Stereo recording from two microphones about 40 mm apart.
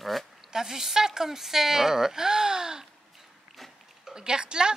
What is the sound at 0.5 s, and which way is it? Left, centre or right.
Speech, centre.